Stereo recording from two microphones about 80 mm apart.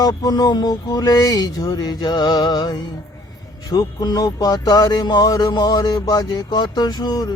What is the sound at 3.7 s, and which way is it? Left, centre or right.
Music, left.